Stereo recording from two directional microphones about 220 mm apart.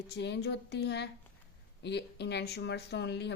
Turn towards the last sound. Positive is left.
turn(degrees=50)  # may be behind; listen again after turning